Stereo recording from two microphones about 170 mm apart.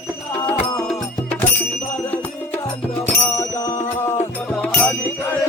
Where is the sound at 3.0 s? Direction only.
15° left (ahead or behind).